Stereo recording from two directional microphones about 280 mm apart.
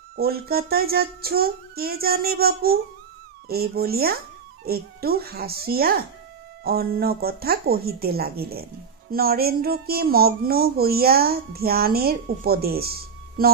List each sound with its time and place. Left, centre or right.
0.1 s speech: right